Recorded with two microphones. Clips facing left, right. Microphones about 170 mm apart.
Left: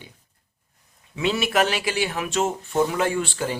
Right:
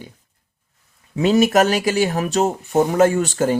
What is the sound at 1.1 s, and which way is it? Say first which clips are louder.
Speech: right 8 dB; 40° right (ahead or behind).